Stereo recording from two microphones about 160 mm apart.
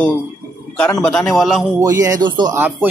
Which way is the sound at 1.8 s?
20° right (ahead or behind).